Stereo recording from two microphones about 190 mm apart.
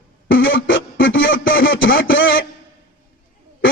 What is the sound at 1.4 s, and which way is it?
Speech, 50° left (ahead or behind).